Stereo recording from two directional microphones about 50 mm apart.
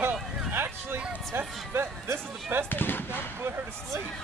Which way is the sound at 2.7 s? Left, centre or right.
Left.